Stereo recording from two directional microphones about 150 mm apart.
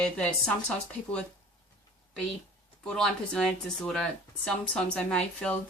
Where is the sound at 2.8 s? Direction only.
5° left (ahead or behind).